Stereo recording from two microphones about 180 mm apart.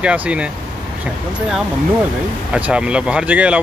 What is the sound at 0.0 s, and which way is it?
Speech, 5° right (ahead or behind).